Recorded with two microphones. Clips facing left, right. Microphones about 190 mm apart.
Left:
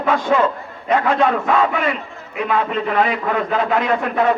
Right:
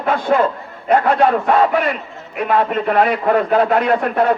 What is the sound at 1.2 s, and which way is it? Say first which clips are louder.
Speech: right 3 dB; 35° right (ahead or behind).